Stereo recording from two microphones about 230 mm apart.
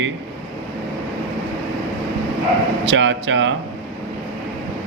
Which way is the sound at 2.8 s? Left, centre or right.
Right.